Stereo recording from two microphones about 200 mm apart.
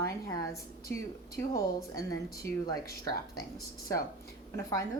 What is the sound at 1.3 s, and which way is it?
A woman's voice, 15° left (ahead or behind).